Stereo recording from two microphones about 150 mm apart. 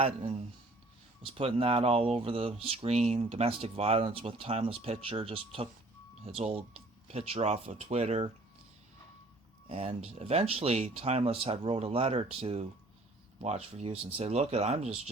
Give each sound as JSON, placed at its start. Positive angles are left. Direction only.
{"t": 0.0, "sound": "speech", "side_deg": -40}
{"t": 9.6, "sound": "speech", "side_deg": -40}